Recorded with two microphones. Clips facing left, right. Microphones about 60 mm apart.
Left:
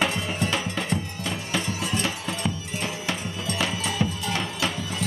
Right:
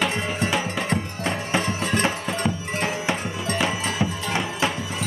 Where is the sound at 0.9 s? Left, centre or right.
Right.